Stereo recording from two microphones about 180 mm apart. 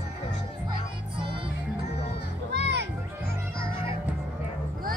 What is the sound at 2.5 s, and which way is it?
Children playing, 70° right (ahead or behind).